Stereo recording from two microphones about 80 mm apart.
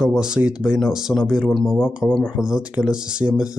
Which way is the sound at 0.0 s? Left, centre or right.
Centre.